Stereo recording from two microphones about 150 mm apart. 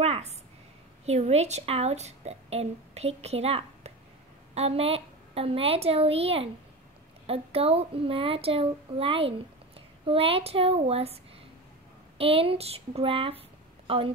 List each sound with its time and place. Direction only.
0.0 s a sound: 45° right (ahead or behind)
1.0 s a woman's voice: 45° right (ahead or behind)
12.2 s speech: 40° right (ahead or behind)